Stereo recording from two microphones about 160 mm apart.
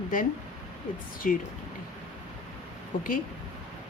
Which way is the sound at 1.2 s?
55° left (ahead or behind).